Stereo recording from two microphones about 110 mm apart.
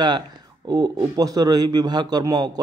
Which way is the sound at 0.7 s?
40° right (ahead or behind).